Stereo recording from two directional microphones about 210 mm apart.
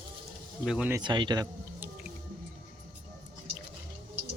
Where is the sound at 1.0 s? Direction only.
20° right (ahead or behind).